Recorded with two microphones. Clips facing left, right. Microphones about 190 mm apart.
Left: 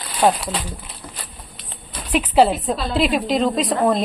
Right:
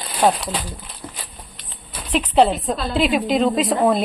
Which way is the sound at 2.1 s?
5° left (ahead or behind).